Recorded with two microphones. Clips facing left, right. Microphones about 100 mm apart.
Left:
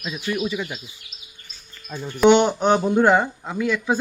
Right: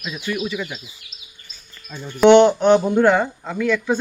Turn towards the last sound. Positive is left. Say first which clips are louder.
# right 2 dB
turn(degrees=10)  # may be behind; listen again after turning